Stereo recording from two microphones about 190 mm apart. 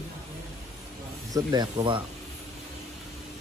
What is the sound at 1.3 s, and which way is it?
Speech, 20° right (ahead or behind).